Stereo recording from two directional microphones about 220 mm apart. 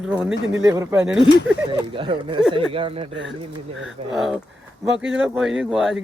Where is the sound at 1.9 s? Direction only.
25° right (ahead or behind).